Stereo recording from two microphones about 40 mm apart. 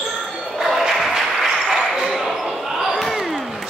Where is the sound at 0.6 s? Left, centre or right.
Centre.